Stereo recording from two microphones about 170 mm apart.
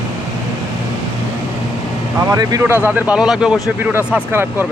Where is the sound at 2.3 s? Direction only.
20° right (ahead or behind).